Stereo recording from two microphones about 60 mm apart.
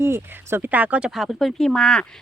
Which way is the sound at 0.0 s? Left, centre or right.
Right.